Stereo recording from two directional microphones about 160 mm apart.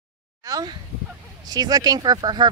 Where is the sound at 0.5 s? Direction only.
25° right (ahead or behind).